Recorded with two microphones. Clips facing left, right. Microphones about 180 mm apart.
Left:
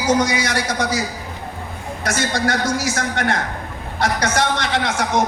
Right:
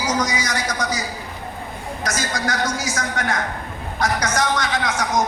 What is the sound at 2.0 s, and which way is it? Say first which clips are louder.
A man's voice: left 4 dB; 30° left (ahead or behind).